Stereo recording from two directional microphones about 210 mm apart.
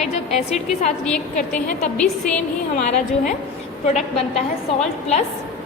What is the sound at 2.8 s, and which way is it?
Speech, 35° left (ahead or behind).